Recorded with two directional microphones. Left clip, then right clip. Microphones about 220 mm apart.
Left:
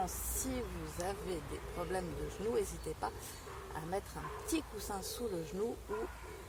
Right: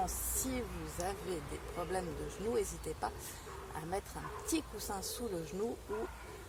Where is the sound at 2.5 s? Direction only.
15° right (ahead or behind).